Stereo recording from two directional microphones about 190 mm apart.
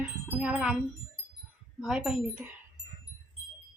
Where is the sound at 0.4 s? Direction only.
5° right (ahead or behind).